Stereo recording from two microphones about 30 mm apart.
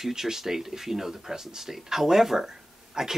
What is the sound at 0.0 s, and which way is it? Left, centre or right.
Speech, centre.